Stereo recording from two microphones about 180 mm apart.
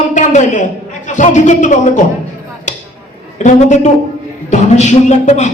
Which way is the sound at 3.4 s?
40° left (ahead or behind).